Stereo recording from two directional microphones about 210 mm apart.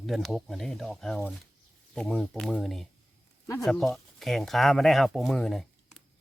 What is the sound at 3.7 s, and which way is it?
Speech, centre (ahead or behind).